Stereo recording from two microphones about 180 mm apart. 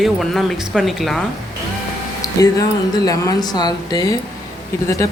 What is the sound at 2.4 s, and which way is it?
Speech, 20° left (ahead or behind).